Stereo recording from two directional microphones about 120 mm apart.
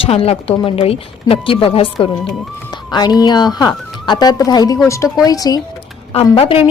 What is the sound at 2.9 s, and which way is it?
Speech, 35° left (ahead or behind).